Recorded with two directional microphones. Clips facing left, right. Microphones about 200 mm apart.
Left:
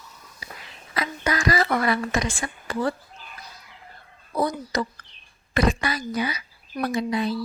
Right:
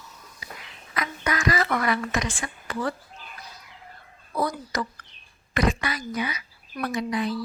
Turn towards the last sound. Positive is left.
turn(degrees=30)  # may be behind; listen again after turning